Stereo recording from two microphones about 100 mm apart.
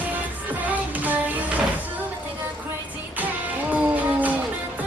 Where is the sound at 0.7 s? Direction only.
15° right (ahead or behind).